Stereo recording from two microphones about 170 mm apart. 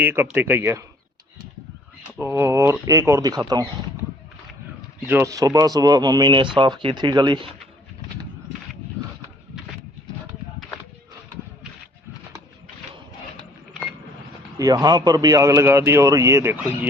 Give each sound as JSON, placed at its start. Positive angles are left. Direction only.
{"t": 0.0, "sound": "speech", "side_deg": -10}
{"t": 2.1, "sound": "speech", "side_deg": -15}
{"t": 5.0, "sound": "speech", "side_deg": -15}
{"t": 14.6, "sound": "speech", "side_deg": -20}